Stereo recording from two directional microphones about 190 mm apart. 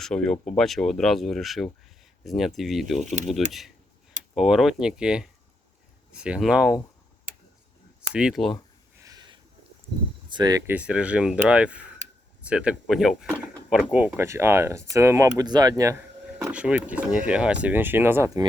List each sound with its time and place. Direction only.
0.0 s speech: 5° left (ahead or behind)
8.1 s speech: 5° right (ahead or behind)
9.0 s a sound: 20° right (ahead or behind)
10.2 s speech: 20° right (ahead or behind)
10.8 s speech: 5° right (ahead or behind)
16.4 s speech: 5° right (ahead or behind)